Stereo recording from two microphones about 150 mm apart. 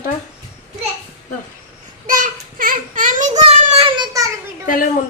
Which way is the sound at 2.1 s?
60° right (ahead or behind).